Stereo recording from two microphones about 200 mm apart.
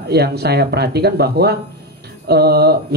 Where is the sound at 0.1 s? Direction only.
55° right (ahead or behind).